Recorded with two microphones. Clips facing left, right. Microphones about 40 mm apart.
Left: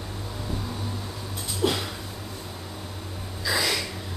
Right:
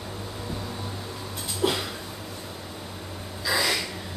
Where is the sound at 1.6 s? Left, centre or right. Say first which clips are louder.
Even; centre.